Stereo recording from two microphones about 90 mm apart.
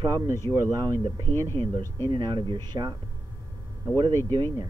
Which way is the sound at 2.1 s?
55° right (ahead or behind).